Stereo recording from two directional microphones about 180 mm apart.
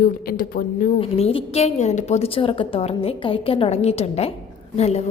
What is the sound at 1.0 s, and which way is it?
A woman's voice, 30° left (ahead or behind).